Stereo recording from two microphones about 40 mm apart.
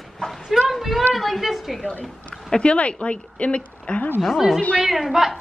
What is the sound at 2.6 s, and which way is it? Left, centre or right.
A woman's voice, left.